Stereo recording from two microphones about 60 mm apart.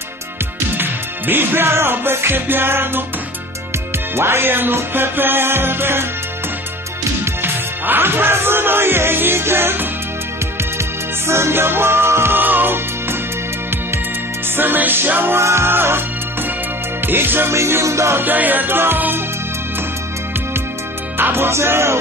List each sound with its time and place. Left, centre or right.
0.7 s music: right
4.1 s music: right
7.4 s music: right
11.2 s music: right
12.4 s music: right
14.5 s music: right
15.3 s music: right
17.0 s music: right
17.6 s music: right
18.2 s music: right
21.2 s music: right